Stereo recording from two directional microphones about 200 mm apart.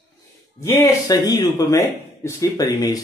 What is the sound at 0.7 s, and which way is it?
Speech, 15° left (ahead or behind).